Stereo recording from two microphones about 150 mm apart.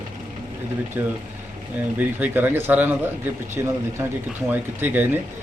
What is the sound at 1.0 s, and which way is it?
Speech, 10° right (ahead or behind).